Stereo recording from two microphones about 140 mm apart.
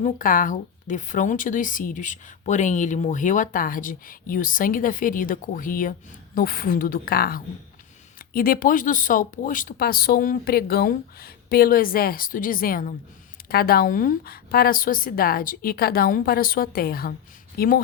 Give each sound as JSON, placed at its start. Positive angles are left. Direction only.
{"t": 0.0, "sound": "speech", "side_deg": 75}
{"t": 6.3, "sound": "speech", "side_deg": 90}